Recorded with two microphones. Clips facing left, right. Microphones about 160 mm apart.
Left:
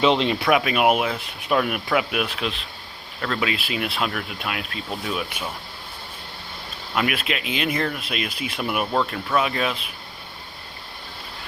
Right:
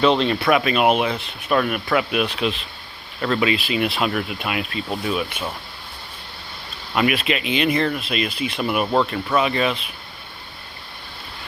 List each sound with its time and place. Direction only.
0.0 s speech: 15° left (ahead or behind); by 5.2 s centre (ahead or behind)
6.9 s speech: centre (ahead or behind)